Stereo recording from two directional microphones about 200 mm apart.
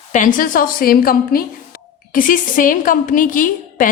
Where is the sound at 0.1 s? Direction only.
40° left (ahead or behind).